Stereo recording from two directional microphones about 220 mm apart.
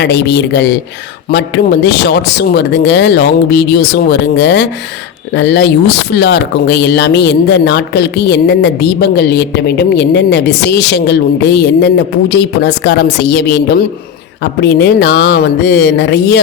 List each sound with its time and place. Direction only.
0.0 s speech: 50° left (ahead or behind)